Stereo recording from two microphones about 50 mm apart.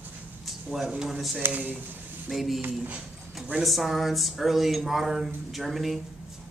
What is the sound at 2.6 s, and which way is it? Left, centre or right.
Speech, right.